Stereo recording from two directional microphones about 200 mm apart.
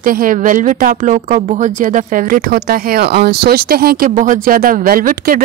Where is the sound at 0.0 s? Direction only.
45° right (ahead or behind).